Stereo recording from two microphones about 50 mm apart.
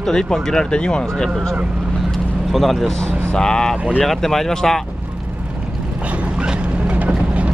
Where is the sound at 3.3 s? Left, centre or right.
Centre.